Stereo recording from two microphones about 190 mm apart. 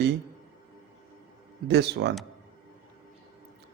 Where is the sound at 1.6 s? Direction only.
60° right (ahead or behind).